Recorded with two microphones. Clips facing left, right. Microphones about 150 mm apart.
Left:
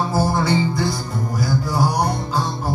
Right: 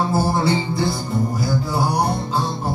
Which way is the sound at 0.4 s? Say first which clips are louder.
Even; 30° right (ahead or behind).